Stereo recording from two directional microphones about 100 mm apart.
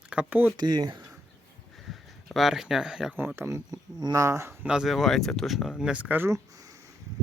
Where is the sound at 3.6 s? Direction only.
40° right (ahead or behind).